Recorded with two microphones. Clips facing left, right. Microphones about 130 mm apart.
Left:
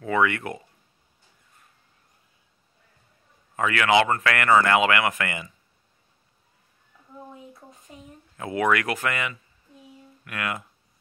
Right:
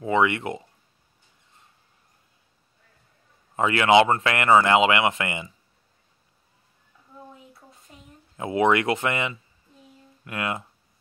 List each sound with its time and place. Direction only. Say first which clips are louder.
0.0 s speech: right 2 dB; 20° right (ahead or behind)
3.5 s speech: right 3 dB; 25° right (ahead or behind)
8.4 s speech: right 3 dB; 25° right (ahead or behind)